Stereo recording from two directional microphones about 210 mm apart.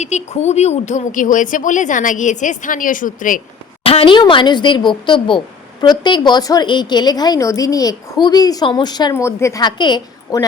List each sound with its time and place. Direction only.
0.0 s speech: 30° left (ahead or behind)
3.8 s a woman's voice: 25° left (ahead or behind)